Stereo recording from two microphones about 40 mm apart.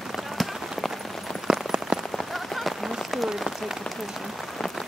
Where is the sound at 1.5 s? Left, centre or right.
Centre.